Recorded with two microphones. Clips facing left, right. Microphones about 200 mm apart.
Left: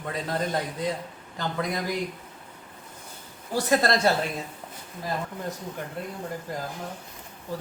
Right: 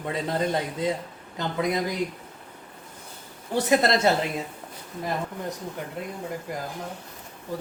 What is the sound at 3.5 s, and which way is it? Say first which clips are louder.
Speech: right 2 dB; 20° right (ahead or behind).